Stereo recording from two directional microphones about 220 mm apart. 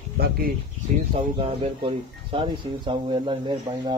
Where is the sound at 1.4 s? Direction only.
25° right (ahead or behind).